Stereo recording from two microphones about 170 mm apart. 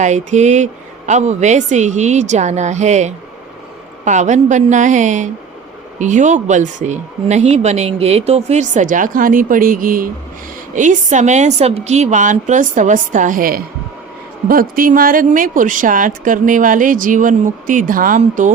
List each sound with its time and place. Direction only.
0.0 s speech: 45° right (ahead or behind)